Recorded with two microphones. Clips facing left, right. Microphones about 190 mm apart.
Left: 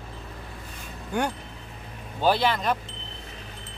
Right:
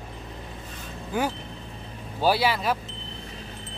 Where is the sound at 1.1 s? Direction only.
5° right (ahead or behind).